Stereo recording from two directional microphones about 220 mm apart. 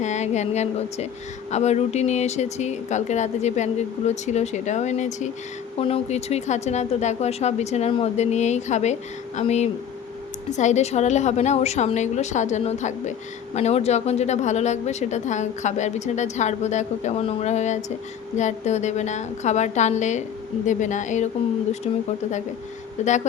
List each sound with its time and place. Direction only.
0.0 s a woman's voice: 30° left (ahead or behind)